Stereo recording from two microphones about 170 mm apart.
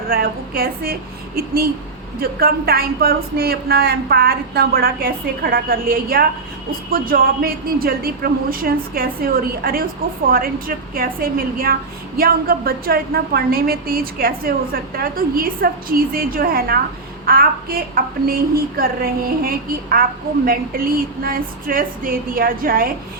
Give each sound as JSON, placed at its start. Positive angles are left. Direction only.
{"t": 0.1, "sound": "a woman's voice", "side_deg": -60}